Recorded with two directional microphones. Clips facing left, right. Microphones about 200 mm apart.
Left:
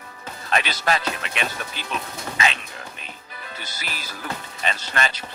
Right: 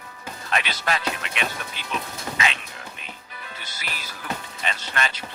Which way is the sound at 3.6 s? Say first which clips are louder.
Left 1 dB; 40° left (ahead or behind).